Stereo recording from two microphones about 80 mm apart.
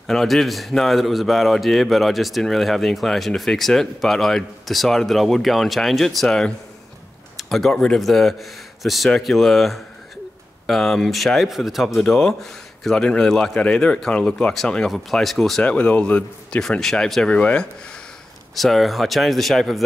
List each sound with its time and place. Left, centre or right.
0.0 s a man's voice: centre
15.6 s speech: centre
18.5 s a man's voice: centre